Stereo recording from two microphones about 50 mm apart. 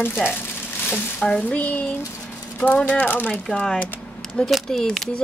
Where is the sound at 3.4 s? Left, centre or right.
Centre.